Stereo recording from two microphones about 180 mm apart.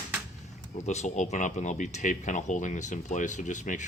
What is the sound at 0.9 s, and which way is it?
Speech, 40° left (ahead or behind).